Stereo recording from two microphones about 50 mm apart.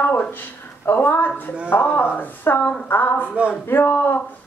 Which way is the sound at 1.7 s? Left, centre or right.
Left.